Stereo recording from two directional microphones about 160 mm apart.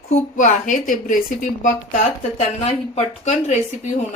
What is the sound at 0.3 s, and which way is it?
A woman's voice, 50° left (ahead or behind).